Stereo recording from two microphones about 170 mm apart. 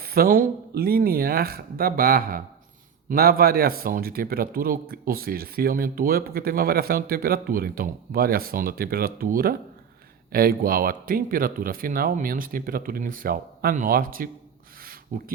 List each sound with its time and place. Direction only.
0.0 s speech: 60° right (ahead or behind)